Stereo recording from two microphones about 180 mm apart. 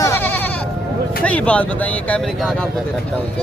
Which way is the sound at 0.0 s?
10° left (ahead or behind).